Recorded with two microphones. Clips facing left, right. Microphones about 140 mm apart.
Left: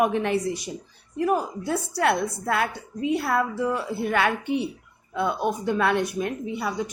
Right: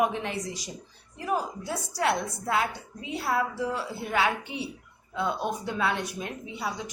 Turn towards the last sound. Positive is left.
turn(degrees=55)  # may be behind; listen again after turning